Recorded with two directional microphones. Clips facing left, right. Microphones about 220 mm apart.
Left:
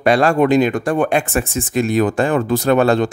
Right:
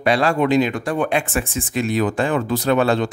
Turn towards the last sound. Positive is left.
turn(degrees=45)  # may be behind; listen again after turning